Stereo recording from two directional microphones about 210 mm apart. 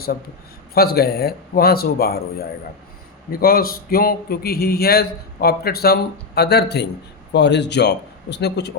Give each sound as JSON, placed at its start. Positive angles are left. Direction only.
{"t": 0.7, "sound": "a man's voice", "side_deg": 45}